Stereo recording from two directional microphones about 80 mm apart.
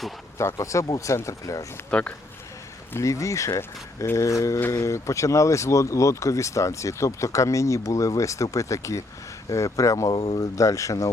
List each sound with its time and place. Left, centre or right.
0.3 s speech: left
1.9 s speech: centre
2.9 s speech: left